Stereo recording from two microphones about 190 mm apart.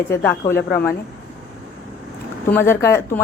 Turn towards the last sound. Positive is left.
turn(degrees=15)  # may be behind; listen again after turning